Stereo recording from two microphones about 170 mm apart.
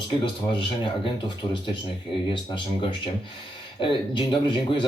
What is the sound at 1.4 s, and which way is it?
Speech, 25° left (ahead or behind).